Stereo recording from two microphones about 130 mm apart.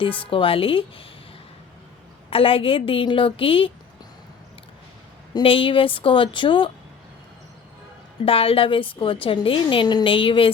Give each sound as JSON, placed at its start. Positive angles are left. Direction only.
{"t": 0.0, "sound": "a woman's voice", "side_deg": 40}
{"t": 2.3, "sound": "a woman's voice", "side_deg": 45}
{"t": 5.3, "sound": "a woman's voice", "side_deg": 45}
{"t": 8.2, "sound": "a woman's voice", "side_deg": 45}